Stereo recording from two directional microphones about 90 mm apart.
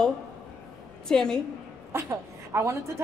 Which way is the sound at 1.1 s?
5° left (ahead or behind).